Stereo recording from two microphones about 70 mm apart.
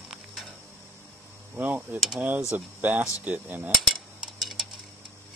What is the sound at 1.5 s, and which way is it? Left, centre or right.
Speech, right.